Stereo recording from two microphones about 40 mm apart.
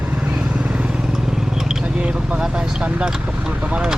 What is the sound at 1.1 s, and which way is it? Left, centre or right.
Vehicle, centre.